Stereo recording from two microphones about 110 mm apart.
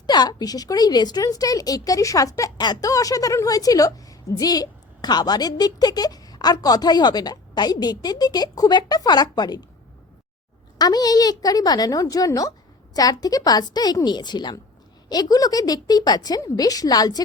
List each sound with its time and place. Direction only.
0.1 s a woman's voice: 40° left (ahead or behind)
10.8 s a woman's voice: 40° left (ahead or behind)